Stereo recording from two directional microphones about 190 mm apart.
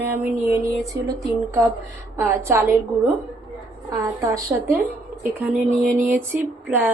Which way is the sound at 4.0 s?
15° right (ahead or behind).